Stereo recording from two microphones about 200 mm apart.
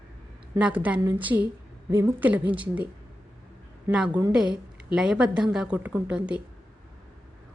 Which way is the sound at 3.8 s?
5° right (ahead or behind).